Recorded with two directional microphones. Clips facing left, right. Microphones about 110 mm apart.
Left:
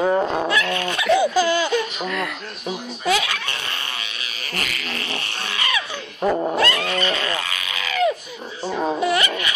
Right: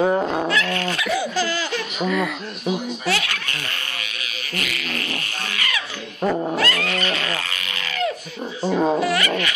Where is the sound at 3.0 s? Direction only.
20° left (ahead or behind).